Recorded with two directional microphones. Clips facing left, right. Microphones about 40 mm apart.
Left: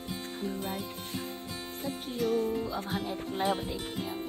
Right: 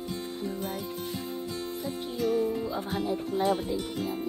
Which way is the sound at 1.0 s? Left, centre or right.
Left.